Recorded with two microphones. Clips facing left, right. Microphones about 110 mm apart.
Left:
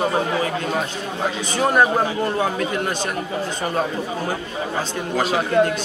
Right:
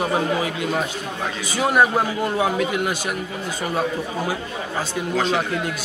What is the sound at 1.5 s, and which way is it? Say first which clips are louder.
A man's voice: even; 5° right (ahead or behind).